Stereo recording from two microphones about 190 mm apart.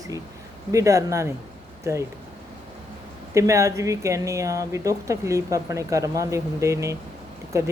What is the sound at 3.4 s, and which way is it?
Speech, 15° right (ahead or behind).